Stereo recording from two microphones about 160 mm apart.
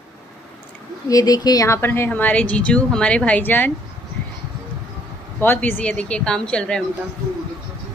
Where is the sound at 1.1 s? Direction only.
20° left (ahead or behind).